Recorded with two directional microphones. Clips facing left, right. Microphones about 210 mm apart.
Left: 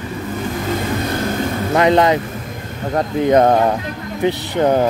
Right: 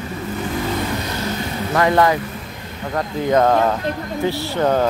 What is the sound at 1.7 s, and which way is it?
Speech, 20° left (ahead or behind).